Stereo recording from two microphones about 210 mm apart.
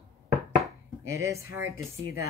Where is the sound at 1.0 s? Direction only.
15° right (ahead or behind).